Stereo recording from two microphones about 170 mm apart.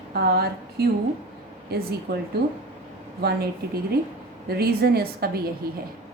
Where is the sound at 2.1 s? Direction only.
75° right (ahead or behind).